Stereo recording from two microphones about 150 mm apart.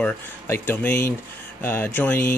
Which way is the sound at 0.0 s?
15° left (ahead or behind).